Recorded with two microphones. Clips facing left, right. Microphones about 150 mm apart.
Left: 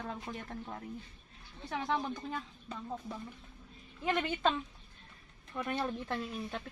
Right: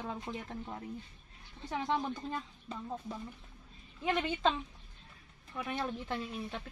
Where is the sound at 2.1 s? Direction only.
5° right (ahead or behind).